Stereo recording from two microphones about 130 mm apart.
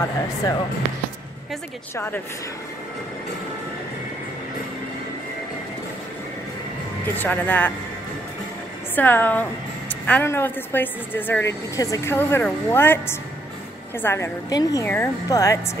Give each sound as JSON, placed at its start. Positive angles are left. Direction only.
{"t": 0.0, "sound": "a woman's voice", "side_deg": 25}
{"t": 2.0, "sound": "a woman's voice", "side_deg": 15}
{"t": 7.2, "sound": "a woman's voice", "side_deg": 15}
{"t": 8.9, "sound": "a woman's voice", "side_deg": 15}